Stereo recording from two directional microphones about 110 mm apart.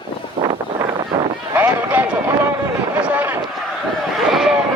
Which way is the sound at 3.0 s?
15° right (ahead or behind).